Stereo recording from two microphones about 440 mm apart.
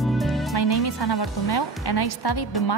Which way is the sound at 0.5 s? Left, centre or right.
Left.